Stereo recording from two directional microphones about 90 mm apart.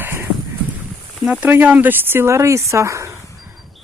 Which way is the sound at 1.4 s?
20° right (ahead or behind).